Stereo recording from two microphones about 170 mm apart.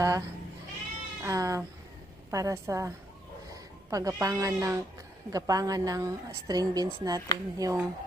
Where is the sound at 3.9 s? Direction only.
20° right (ahead or behind).